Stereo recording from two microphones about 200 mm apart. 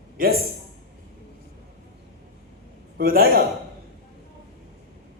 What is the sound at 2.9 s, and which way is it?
Speech, 45° right (ahead or behind).